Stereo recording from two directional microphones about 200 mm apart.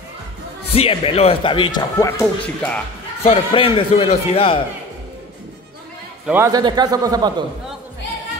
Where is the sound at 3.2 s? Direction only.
25° left (ahead or behind).